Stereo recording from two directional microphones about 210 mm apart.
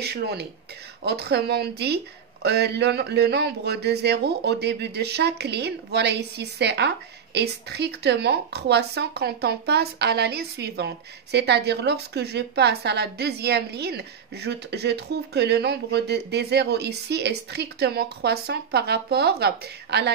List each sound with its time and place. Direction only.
0.0 s a woman's voice: 50° right (ahead or behind)